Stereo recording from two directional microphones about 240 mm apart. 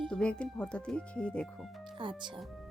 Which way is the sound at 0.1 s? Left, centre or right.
Centre.